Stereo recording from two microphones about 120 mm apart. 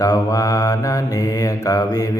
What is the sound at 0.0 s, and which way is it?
Mantra, 30° left (ahead or behind).